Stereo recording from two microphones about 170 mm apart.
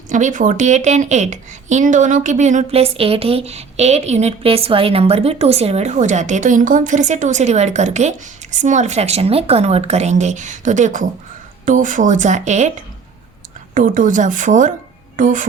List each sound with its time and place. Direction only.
0.1 s speech: 50° right (ahead or behind)
13.7 s speech: 50° right (ahead or behind)